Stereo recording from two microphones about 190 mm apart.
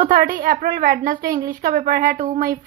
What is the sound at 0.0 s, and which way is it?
A woman's voice, 45° right (ahead or behind).